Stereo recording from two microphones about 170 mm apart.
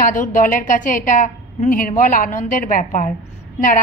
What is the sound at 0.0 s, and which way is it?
A woman's voice, 50° left (ahead or behind).